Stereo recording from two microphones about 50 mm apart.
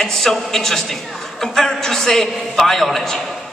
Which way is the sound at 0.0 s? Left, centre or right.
Centre.